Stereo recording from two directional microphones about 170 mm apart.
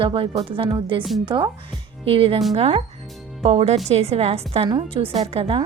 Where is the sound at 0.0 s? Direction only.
30° right (ahead or behind).